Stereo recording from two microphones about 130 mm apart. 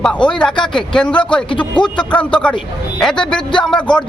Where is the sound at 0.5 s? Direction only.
40° left (ahead or behind).